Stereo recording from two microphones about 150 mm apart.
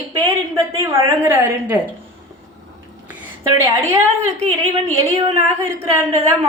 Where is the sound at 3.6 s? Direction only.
20° right (ahead or behind).